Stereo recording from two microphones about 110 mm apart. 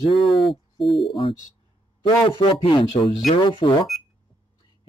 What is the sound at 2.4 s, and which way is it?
A man's voice, 55° left (ahead or behind).